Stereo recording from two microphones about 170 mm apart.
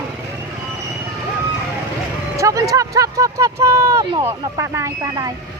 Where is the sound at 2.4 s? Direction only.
20° right (ahead or behind).